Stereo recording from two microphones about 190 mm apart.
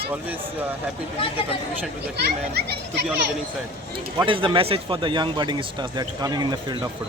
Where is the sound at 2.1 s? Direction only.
60° right (ahead or behind).